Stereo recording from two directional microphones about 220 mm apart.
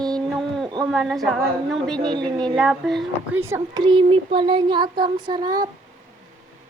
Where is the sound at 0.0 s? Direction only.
Centre (ahead or behind).